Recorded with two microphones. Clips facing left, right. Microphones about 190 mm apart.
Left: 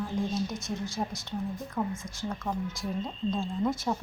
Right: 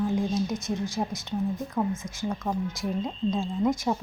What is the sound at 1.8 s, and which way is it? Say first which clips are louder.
Speech: right 3 dB; 15° right (ahead or behind).